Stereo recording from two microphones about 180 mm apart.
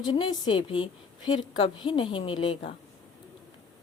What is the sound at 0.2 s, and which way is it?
A woman's voice, 25° left (ahead or behind).